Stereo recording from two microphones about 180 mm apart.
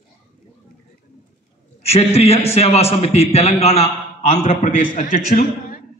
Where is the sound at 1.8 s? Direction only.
35° left (ahead or behind).